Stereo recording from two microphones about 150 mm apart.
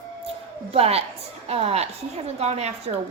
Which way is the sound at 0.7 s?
40° right (ahead or behind).